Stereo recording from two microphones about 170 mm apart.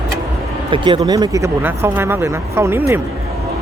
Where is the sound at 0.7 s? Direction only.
30° right (ahead or behind).